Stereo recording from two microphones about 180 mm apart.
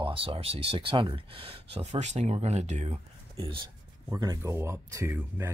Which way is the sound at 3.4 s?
30° right (ahead or behind).